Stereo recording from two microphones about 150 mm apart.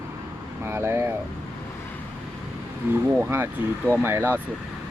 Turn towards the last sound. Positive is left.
turn(degrees=-15)  # may be behind; listen again after turning